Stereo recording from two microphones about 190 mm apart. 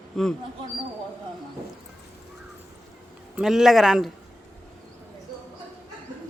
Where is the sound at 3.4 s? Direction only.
Centre (ahead or behind).